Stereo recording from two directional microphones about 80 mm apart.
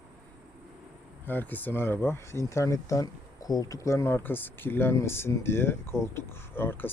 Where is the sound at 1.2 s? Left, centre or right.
Left.